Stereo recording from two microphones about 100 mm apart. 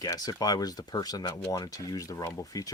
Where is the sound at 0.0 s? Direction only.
40° left (ahead or behind).